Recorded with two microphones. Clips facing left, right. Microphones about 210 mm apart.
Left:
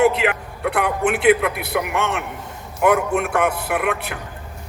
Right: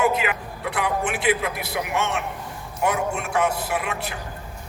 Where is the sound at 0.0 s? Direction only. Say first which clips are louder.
Left 5 dB; 65° left (ahead or behind).